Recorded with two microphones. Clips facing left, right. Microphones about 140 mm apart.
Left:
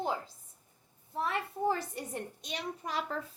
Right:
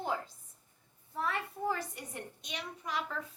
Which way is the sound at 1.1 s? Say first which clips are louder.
Left 2 dB; 25° left (ahead or behind).